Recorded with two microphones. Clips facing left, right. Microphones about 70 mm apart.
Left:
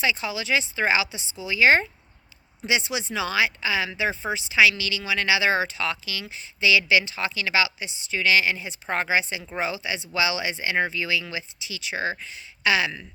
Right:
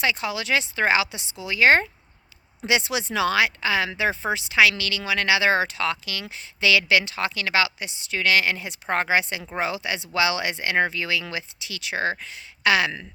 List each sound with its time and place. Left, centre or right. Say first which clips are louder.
0.0 s a woman's voice: right 1 dB; right
2.6 s speech: right 2 dB; right
3.2 s a woman's voice: right 2 dB; right
6.2 s a woman's voice: even; right